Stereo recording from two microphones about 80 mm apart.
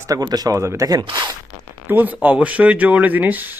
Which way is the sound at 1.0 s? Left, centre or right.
Right.